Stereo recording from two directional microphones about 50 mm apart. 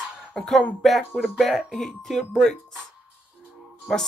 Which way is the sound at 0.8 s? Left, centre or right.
Centre.